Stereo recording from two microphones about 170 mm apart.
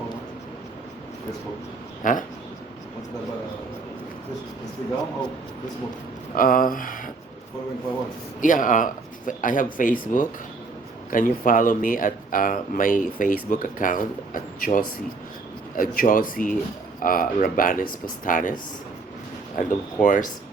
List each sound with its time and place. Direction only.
2.0 s speech: 50° left (ahead or behind)
6.3 s speech: 55° left (ahead or behind)
8.4 s speech: 50° left (ahead or behind)
19.5 s speech: 50° left (ahead or behind)